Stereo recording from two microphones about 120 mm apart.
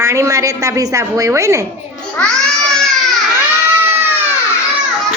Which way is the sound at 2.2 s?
5° left (ahead or behind).